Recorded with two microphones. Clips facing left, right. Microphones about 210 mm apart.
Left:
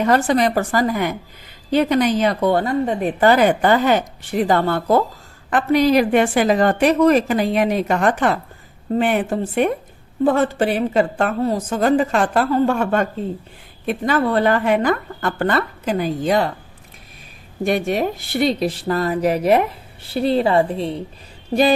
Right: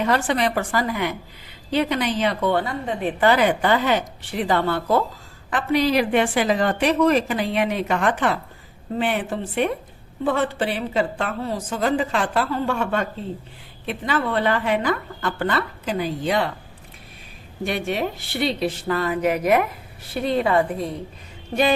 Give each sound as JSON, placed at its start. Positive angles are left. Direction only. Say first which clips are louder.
{"t": 0.0, "sound": "a woman's voice", "louder": "left 5 dB", "side_deg": 40}
{"t": 17.7, "sound": "speech", "louder": "left 5 dB", "side_deg": 45}